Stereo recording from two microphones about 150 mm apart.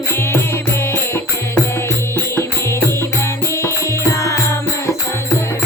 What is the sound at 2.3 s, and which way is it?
Music, 15° left (ahead or behind).